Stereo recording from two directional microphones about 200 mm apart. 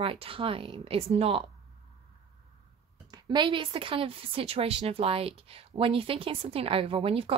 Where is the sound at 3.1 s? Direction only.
20° right (ahead or behind).